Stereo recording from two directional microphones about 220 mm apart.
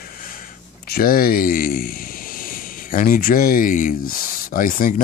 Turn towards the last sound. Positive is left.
turn(degrees=40)  # may be behind; listen again after turning